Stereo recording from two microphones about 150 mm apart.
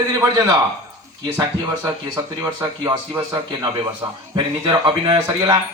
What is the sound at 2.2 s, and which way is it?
Speech, 20° right (ahead or behind).